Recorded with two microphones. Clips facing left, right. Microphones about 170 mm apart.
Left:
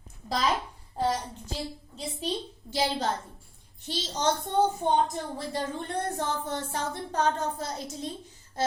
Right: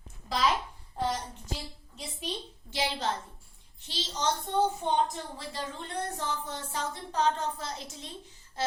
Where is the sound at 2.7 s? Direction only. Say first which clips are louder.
Left 4 dB; 35° left (ahead or behind).